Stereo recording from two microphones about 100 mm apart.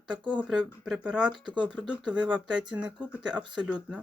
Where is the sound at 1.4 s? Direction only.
50° right (ahead or behind).